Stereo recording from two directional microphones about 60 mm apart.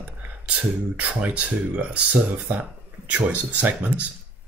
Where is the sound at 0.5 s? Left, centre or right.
Right.